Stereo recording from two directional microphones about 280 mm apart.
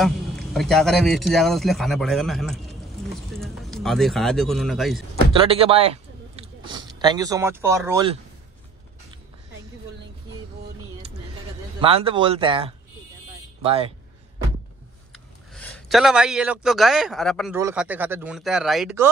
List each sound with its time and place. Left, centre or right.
0.0 s a man's voice: centre
5.3 s a man's voice: centre
11.8 s speech: centre
15.1 s speech: centre